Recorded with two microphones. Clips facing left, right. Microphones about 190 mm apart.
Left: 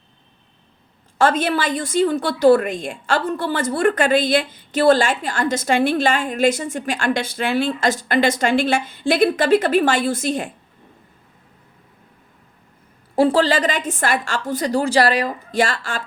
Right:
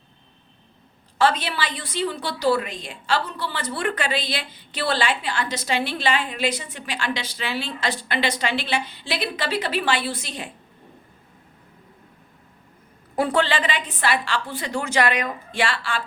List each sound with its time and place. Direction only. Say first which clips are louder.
1.2 s a woman's voice: left 4 dB; 50° left (ahead or behind)
13.1 s a woman's voice: left 6 dB; 30° left (ahead or behind)